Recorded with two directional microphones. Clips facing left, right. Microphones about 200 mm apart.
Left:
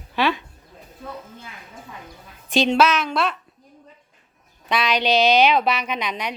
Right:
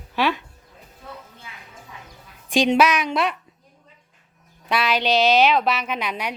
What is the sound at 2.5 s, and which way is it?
Speech, 15° right (ahead or behind).